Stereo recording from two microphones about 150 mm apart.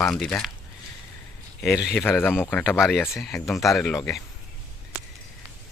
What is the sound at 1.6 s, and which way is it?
Speech, centre (ahead or behind).